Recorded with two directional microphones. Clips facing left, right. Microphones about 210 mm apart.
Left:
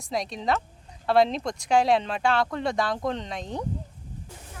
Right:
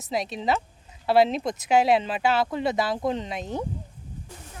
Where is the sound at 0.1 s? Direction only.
5° right (ahead or behind).